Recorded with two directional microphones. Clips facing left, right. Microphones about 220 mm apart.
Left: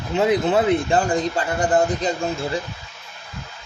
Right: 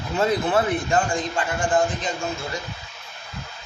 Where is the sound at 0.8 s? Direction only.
35° left (ahead or behind).